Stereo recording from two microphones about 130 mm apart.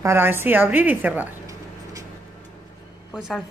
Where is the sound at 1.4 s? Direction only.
25° right (ahead or behind).